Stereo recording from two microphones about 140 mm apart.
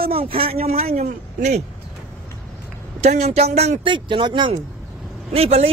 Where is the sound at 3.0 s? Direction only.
50° right (ahead or behind).